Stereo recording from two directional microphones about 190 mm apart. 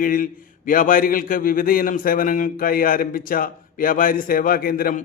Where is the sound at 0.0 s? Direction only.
45° left (ahead or behind).